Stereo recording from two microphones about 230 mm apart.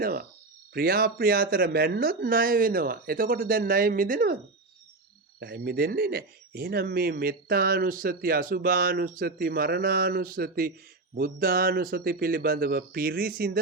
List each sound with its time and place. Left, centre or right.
0.0 s speech: right
5.4 s speech: right